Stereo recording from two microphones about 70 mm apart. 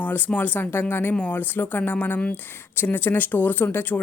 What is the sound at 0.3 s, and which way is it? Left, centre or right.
A woman's voice, left.